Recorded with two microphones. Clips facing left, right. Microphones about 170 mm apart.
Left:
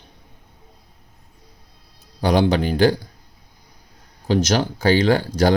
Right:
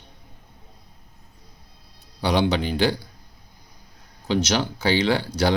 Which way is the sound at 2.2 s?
50° left (ahead or behind).